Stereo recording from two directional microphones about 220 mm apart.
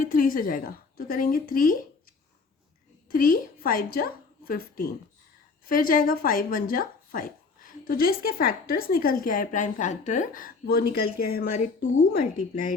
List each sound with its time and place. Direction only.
0.0 s a woman's voice: 40° left (ahead or behind)
3.1 s a woman's voice: 40° left (ahead or behind)
11.5 s a woman's voice: 35° left (ahead or behind)